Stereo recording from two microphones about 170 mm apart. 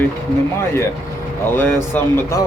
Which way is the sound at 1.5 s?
10° left (ahead or behind).